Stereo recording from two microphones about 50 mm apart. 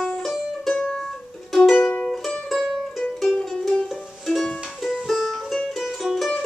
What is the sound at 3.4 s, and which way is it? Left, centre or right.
Music, centre.